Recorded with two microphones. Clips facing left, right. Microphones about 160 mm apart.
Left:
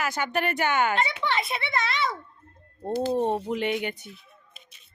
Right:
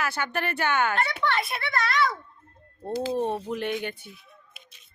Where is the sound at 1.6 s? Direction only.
20° left (ahead or behind).